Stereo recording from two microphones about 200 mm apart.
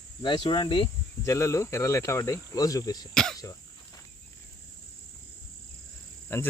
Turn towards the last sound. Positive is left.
turn(degrees=10)  # may be behind; listen again after turning